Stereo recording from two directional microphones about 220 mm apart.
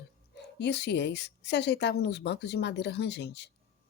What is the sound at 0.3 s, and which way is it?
Speech, 50° left (ahead or behind).